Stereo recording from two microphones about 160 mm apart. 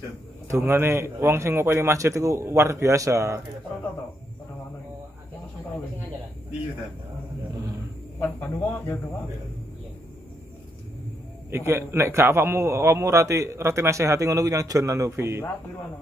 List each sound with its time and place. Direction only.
0.5 s a man's voice: 15° right (ahead or behind)
8.2 s speech: 15° left (ahead or behind)
11.5 s a man's voice: 15° right (ahead or behind)